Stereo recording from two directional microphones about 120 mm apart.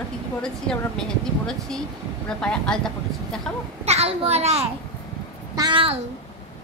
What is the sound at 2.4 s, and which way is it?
Speech, 5° left (ahead or behind).